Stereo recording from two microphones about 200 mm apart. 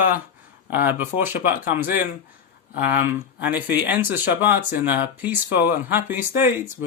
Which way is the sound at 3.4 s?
10° right (ahead or behind).